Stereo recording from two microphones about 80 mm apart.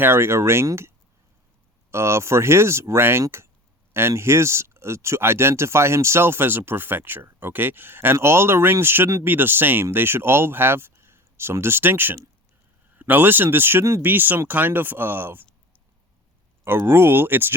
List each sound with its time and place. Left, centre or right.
0.0 s speech: right
16.6 s speech: right